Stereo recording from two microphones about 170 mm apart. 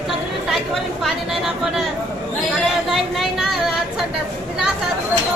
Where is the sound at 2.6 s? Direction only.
Centre (ahead or behind).